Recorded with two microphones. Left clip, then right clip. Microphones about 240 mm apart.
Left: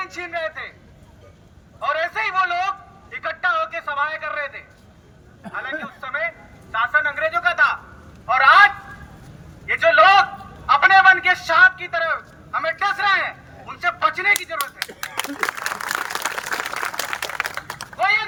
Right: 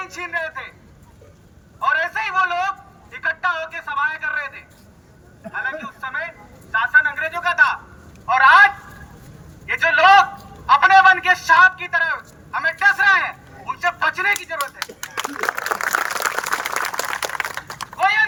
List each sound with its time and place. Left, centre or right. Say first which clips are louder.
0.0 s a man's voice: right 1 dB; centre
1.8 s a man's voice: right 2 dB; centre
5.6 s a man's voice: right 2 dB; centre
15.5 s a sound: right 4 dB; centre